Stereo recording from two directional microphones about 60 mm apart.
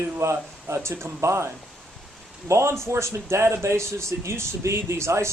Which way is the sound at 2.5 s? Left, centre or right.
Right.